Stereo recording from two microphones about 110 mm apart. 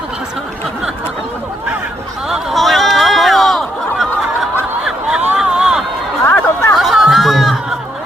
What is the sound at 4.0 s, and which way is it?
Snicker, centre (ahead or behind).